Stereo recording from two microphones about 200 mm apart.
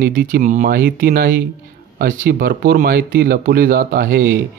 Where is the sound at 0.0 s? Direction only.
45° right (ahead or behind).